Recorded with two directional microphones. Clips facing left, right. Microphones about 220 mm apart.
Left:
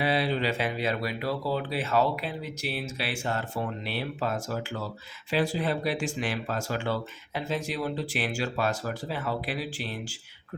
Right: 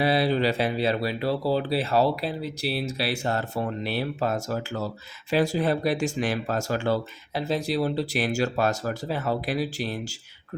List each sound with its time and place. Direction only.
0.0 s speech: 40° right (ahead or behind)